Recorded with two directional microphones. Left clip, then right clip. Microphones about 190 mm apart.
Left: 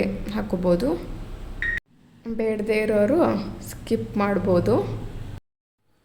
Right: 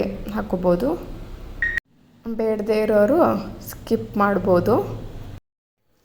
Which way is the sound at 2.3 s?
Centre (ahead or behind).